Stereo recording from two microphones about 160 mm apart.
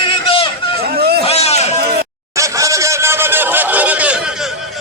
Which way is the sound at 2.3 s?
20° right (ahead or behind).